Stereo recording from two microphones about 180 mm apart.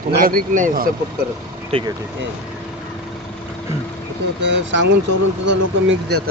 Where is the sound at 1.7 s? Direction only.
30° right (ahead or behind).